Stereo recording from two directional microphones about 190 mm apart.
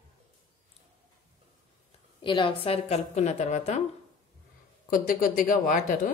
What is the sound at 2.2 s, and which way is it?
Speech, 25° left (ahead or behind).